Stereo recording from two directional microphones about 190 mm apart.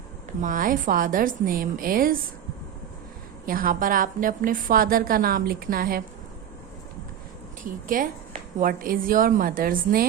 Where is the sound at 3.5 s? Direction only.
50° right (ahead or behind).